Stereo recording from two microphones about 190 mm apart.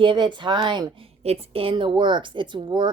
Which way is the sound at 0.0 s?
25° right (ahead or behind).